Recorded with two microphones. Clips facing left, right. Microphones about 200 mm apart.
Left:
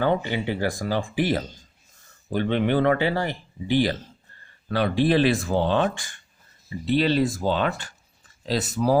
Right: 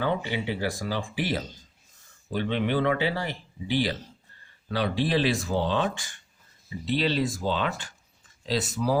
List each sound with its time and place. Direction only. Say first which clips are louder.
0.0 s speech: left 4 dB; 50° left (ahead or behind)